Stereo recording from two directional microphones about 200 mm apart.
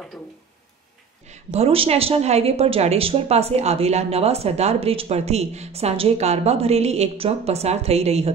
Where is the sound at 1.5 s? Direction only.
30° right (ahead or behind).